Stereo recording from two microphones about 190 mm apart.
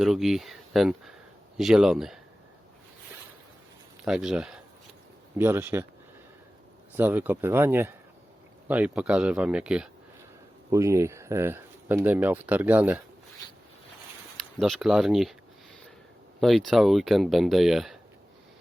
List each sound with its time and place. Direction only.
0.0 s speech: centre (ahead or behind)
4.0 s speech: 5° right (ahead or behind)
6.9 s speech: 10° right (ahead or behind)
14.6 s speech: centre (ahead or behind)
16.4 s speech: centre (ahead or behind)